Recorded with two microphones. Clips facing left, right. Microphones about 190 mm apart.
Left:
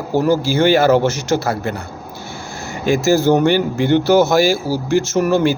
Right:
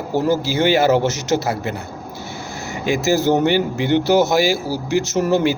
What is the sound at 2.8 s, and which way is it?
A man's voice, 20° right (ahead or behind).